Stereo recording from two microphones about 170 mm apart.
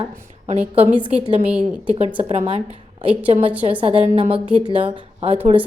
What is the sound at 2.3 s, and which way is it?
A woman's voice, 40° right (ahead or behind).